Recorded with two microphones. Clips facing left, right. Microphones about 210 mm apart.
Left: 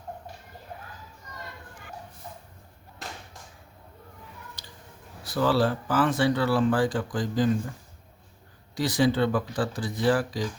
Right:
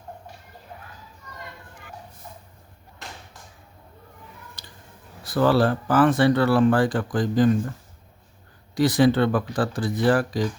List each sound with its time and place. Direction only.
5.2 s speech: 55° right (ahead or behind)
8.7 s speech: 55° right (ahead or behind)